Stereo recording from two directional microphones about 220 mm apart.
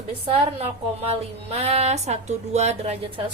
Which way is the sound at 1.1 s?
30° right (ahead or behind).